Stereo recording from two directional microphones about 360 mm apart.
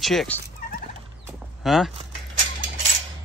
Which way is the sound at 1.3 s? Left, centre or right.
Centre.